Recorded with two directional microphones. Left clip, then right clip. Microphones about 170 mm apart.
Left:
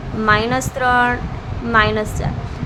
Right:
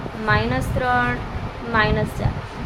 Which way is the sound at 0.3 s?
20° left (ahead or behind).